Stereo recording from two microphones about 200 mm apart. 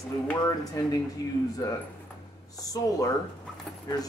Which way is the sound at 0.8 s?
15° left (ahead or behind).